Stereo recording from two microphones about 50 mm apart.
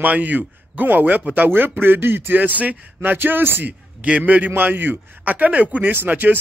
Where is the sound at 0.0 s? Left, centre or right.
Right.